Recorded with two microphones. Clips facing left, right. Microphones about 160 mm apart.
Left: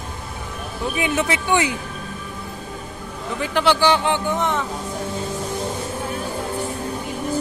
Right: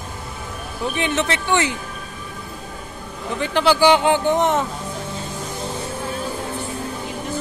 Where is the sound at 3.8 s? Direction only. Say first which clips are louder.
Right 4 dB; 15° right (ahead or behind).